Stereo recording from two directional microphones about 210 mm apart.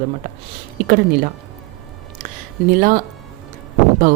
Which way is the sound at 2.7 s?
40° right (ahead or behind).